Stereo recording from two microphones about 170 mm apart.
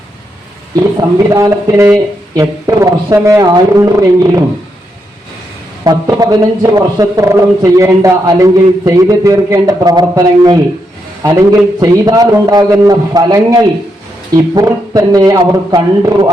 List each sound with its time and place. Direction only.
0.9 s a man's voice: 20° right (ahead or behind)
5.8 s a man's voice: 20° right (ahead or behind)